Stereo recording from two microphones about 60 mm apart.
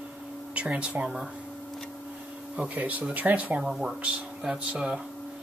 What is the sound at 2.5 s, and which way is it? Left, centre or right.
Speech, right.